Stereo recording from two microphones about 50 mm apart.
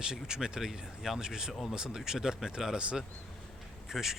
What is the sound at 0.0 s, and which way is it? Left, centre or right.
Speech, centre.